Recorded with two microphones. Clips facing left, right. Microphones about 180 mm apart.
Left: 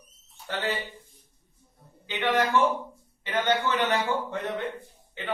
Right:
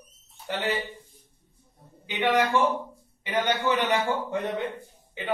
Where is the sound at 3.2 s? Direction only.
15° right (ahead or behind).